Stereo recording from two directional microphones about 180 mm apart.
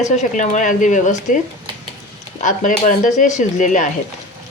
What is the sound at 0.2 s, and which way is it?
Speech, 45° left (ahead or behind).